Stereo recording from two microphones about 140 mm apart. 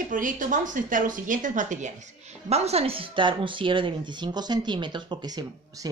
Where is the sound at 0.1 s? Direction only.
70° right (ahead or behind).